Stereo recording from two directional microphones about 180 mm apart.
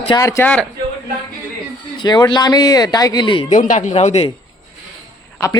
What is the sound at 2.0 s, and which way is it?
Speech, 25° left (ahead or behind).